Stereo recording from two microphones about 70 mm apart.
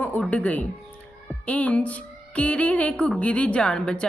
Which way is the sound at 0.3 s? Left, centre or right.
Left.